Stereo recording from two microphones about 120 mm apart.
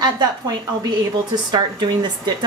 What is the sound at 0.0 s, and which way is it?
Speech, 35° right (ahead or behind).